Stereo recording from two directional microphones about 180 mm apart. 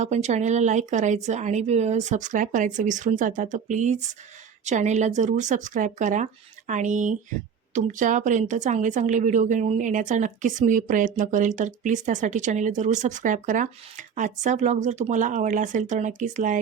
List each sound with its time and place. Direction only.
0.0 s speech: 40° right (ahead or behind)